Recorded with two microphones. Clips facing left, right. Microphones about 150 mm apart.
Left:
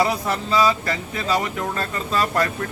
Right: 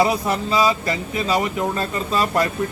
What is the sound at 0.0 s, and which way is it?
Speech, 15° right (ahead or behind).